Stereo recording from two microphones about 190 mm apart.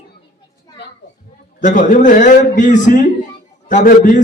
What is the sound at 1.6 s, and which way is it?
A man's voice, 40° left (ahead or behind).